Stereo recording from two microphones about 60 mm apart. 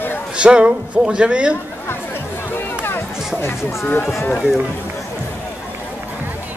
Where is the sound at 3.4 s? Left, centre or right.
Left.